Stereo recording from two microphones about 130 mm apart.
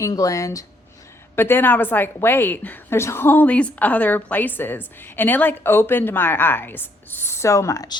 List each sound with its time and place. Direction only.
0.0 s a woman's voice: 25° left (ahead or behind)